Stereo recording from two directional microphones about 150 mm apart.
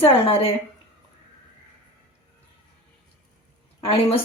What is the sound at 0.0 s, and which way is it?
Speech, 40° left (ahead or behind).